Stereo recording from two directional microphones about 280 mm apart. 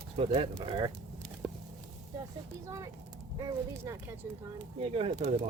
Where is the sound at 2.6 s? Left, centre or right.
Centre.